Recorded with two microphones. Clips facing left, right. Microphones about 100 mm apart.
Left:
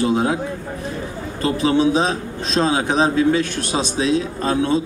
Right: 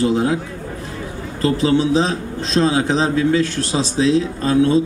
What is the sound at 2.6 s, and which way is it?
Speech, 30° left (ahead or behind).